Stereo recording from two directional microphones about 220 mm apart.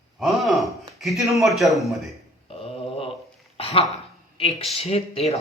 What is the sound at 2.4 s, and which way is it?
Mantra, 25° left (ahead or behind).